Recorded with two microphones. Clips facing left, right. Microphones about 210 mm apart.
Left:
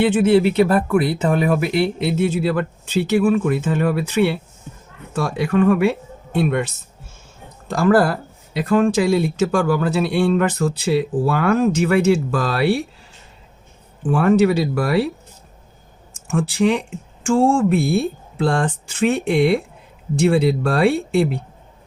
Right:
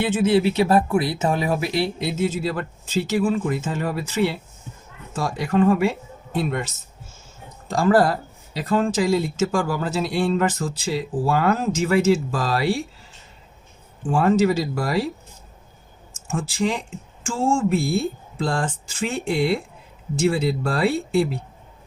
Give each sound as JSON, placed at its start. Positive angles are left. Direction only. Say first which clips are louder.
{"t": 0.0, "sound": "speech", "louder": "left 4 dB", "side_deg": 60}
{"t": 7.7, "sound": "speech", "louder": "left 2 dB", "side_deg": 60}
{"t": 14.1, "sound": "speech", "louder": "left 3 dB", "side_deg": 60}
{"t": 16.3, "sound": "speech", "louder": "left 6 dB", "side_deg": 65}